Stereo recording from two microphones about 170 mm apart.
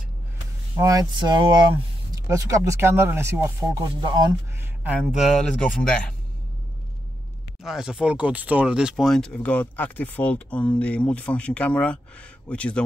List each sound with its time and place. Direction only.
0.7 s speech: 20° right (ahead or behind)
4.8 s speech: 5° right (ahead or behind)
7.6 s speech: 5° right (ahead or behind)